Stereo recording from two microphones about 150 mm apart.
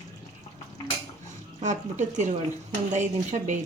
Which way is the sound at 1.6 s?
55° right (ahead or behind).